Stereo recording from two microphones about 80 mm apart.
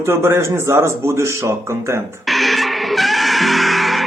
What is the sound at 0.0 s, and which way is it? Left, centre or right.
A man's voice, right.